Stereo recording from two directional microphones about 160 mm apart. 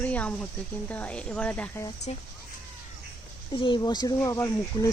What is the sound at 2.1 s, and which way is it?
Speech, 40° left (ahead or behind).